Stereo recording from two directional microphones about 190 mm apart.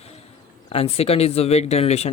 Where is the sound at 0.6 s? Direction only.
30° left (ahead or behind).